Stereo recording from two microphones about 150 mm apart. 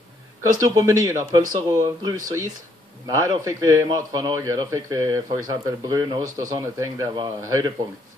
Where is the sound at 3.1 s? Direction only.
20° right (ahead or behind).